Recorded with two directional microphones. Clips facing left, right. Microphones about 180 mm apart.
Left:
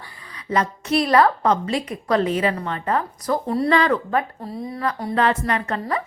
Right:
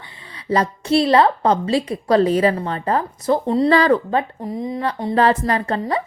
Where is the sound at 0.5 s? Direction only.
30° right (ahead or behind).